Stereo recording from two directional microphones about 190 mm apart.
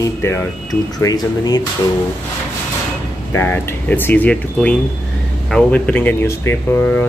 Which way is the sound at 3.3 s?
10° left (ahead or behind).